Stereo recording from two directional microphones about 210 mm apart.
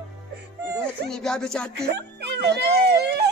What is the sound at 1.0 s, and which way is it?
Speech, 5° left (ahead or behind).